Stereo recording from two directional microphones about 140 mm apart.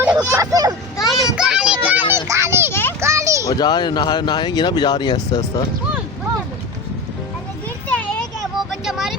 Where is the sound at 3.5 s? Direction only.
30° left (ahead or behind).